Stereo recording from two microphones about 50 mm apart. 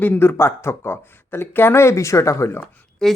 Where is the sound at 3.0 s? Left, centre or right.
Centre.